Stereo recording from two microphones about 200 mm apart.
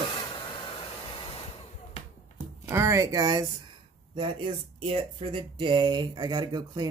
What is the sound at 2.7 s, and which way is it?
Speech, 15° right (ahead or behind).